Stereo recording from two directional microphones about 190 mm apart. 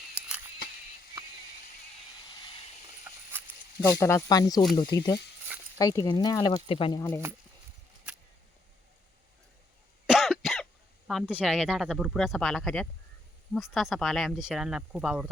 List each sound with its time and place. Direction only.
3.1 s a sound: 15° right (ahead or behind)
4.0 s speech: 15° left (ahead or behind)
10.1 s cough: centre (ahead or behind)
11.1 s speech: 5° right (ahead or behind)